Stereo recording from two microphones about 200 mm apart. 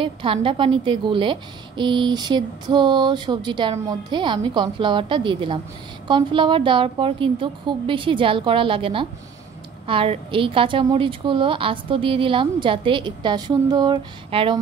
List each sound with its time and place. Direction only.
0.0 s a woman's voice: 25° right (ahead or behind)